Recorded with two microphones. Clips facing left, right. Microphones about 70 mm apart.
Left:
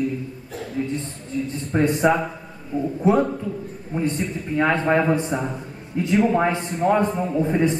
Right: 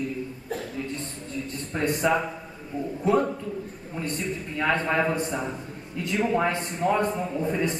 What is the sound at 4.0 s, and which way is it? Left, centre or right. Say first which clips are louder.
A man's voice: left 6 dB; left.